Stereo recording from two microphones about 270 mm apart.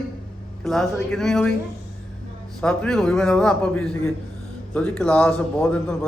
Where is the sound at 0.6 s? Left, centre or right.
Centre.